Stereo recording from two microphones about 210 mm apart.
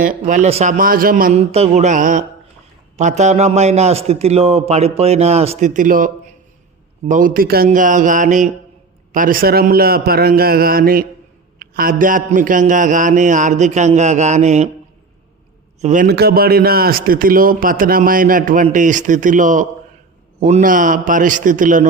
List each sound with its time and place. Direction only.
0.0 s a man's voice: 40° right (ahead or behind)
15.8 s speech: 35° right (ahead or behind)